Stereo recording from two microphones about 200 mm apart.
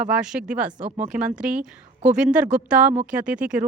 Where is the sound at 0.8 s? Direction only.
30° right (ahead or behind).